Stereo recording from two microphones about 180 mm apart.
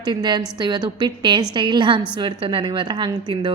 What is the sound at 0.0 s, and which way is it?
A woman's voice, 25° right (ahead or behind).